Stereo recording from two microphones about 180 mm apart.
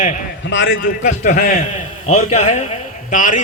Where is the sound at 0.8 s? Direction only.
45° left (ahead or behind).